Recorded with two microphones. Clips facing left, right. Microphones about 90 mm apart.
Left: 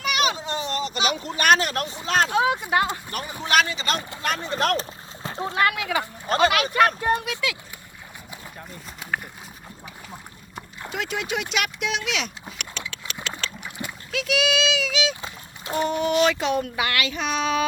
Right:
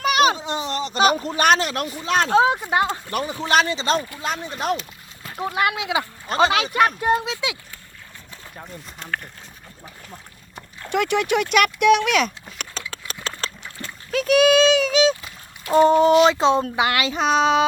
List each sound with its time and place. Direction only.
0.0 s a sound: 40° right (ahead or behind)
0.9 s speech: 40° right (ahead or behind)
1.5 s speech: 45° left (ahead or behind)
2.1 s speech: 30° right (ahead or behind)
4.2 s speech: 60° left (ahead or behind)
4.8 s splash: 25° left (ahead or behind)
5.5 s speech: 20° right (ahead or behind)
10.9 s speech: 60° right (ahead or behind)
12.8 s engine: 35° right (ahead or behind)
13.4 s a sound: 35° right (ahead or behind)
14.1 s clip-clop: 45° right (ahead or behind)
15.7 s speech: 35° right (ahead or behind)